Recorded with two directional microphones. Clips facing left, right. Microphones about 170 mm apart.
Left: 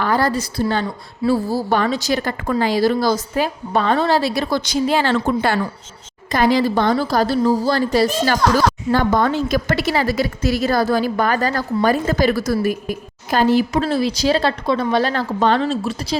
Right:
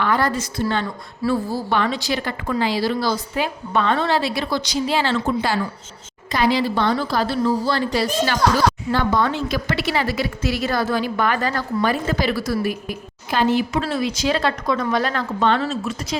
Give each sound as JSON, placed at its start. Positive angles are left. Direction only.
{"t": 0.0, "sound": "a woman's voice", "side_deg": 35}